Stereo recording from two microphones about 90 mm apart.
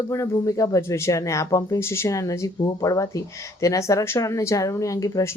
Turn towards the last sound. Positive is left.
turn(degrees=40)  # may be behind; listen again after turning